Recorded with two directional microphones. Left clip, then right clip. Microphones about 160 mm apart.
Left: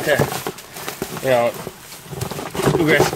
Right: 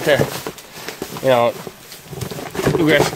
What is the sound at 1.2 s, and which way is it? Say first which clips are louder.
Speech: right 2 dB; 30° right (ahead or behind).